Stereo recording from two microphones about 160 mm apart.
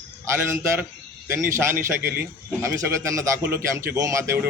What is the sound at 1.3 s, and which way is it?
A man's voice, 15° right (ahead or behind).